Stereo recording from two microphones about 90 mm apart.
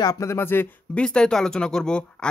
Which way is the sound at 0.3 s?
25° left (ahead or behind).